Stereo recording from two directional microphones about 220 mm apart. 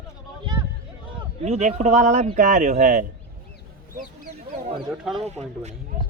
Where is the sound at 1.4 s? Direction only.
30° right (ahead or behind).